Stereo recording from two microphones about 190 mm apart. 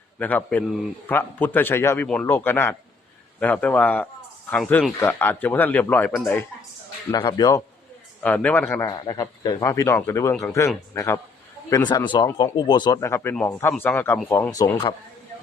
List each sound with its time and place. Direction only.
0.2 s speech: 10° left (ahead or behind)
7.1 s speech: 20° left (ahead or behind)
8.2 s speech: 10° left (ahead or behind)
11.9 s speech: 25° left (ahead or behind)